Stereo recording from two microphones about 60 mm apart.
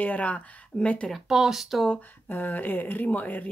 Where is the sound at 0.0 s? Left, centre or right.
Left.